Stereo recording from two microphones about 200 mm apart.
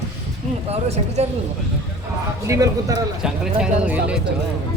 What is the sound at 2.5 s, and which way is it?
Speech, 15° right (ahead or behind).